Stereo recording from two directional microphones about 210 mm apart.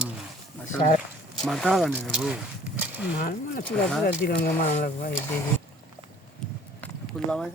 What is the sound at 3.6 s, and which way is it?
Speech, 5° left (ahead or behind).